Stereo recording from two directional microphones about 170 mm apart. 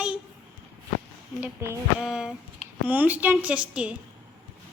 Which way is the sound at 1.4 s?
15° right (ahead or behind).